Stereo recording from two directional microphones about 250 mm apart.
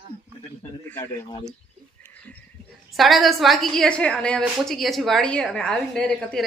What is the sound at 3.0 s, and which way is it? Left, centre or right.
Speech, centre.